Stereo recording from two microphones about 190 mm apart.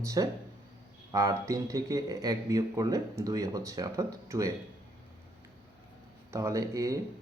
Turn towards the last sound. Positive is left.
turn(degrees=-15)  # may be behind; listen again after turning